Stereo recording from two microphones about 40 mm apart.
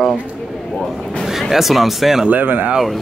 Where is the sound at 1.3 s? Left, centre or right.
Centre.